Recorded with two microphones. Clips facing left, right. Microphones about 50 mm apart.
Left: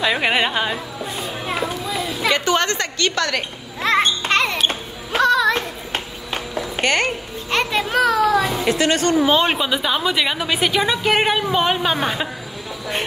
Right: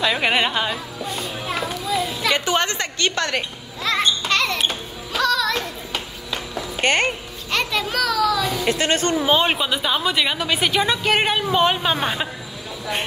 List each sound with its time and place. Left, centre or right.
0.0 s speech: centre
1.0 s music: left
2.3 s a sound: centre
3.8 s speech: left
4.6 s music: left
5.3 s a sound: left
6.8 s speech: right
7.5 s children playing: left
8.7 s speech: right
9.5 s a woman's voice: centre